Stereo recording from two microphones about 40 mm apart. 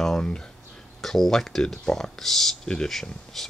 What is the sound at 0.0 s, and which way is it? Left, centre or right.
Speech, left.